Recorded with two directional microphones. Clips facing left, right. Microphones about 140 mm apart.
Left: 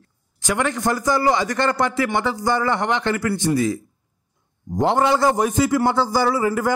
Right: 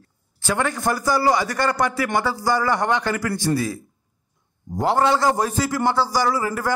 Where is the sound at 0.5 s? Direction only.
15° left (ahead or behind).